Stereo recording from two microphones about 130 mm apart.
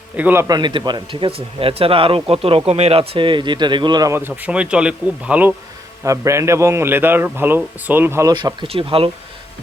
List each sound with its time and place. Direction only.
0.2 s speech: 15° right (ahead or behind)
0.4 s speech: 30° right (ahead or behind)
4.1 s speech: 15° right (ahead or behind)
6.1 s a man's voice: 20° right (ahead or behind)
8.3 s speech: 35° right (ahead or behind)
8.6 s speech: 45° right (ahead or behind)